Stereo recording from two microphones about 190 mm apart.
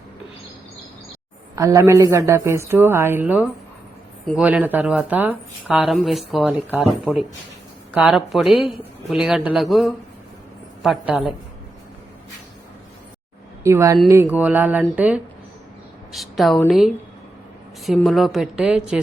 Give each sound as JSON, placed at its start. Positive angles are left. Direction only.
{"t": 1.5, "sound": "a woman's voice", "side_deg": -15}
{"t": 13.7, "sound": "a woman's voice", "side_deg": -15}